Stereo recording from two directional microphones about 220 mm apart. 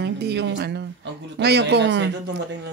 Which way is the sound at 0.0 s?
50° right (ahead or behind).